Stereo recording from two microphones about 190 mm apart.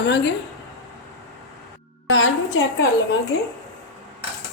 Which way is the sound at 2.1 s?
90° left.